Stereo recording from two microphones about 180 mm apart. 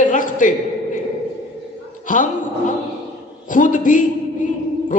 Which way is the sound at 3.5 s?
45° left (ahead or behind).